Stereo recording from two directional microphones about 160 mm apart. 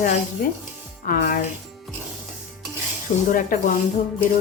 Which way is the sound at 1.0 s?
60° left (ahead or behind).